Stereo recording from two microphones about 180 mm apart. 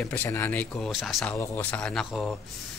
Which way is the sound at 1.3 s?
15° left (ahead or behind).